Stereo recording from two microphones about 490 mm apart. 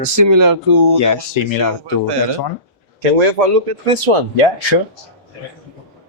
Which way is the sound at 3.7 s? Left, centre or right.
Right.